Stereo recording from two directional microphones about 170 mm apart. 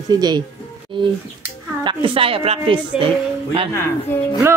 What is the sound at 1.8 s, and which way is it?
A woman's voice, 30° right (ahead or behind).